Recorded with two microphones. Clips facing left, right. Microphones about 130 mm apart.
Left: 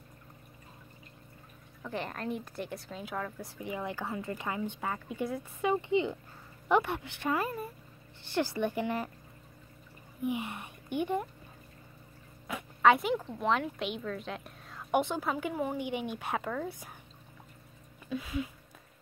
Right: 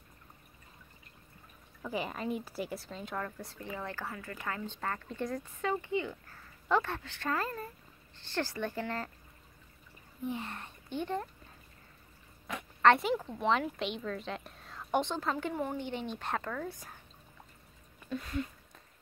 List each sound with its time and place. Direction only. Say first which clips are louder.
1.8 s a woman's voice: right 1 dB; 5° right (ahead or behind); by 9.1 s 15° left (ahead or behind)
10.2 s a woman's voice: left 4 dB; 15° left (ahead or behind)
12.4 s speech: left 1 dB; 5° left (ahead or behind)
18.1 s speech: left 1 dB; 5° left (ahead or behind)